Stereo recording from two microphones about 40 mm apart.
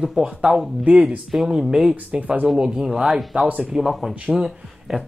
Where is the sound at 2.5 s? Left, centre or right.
Right.